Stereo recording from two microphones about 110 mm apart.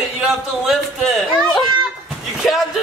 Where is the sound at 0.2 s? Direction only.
Centre (ahead or behind).